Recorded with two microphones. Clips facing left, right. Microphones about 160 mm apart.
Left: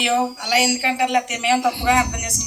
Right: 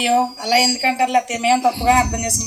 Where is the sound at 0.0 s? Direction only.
35° right (ahead or behind).